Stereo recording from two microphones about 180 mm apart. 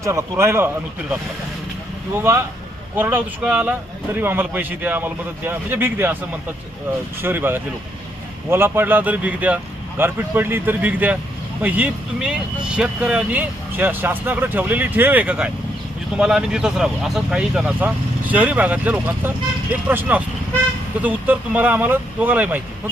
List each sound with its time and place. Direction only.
0.0 s speech: 15° right (ahead or behind)
2.1 s speech: 15° right (ahead or behind)
7.2 s speech: 10° right (ahead or behind)